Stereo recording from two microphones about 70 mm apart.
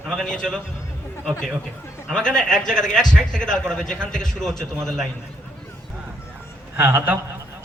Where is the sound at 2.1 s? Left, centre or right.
Centre.